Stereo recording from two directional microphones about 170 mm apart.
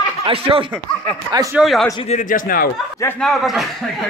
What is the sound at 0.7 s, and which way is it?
Speech, 5° left (ahead or behind).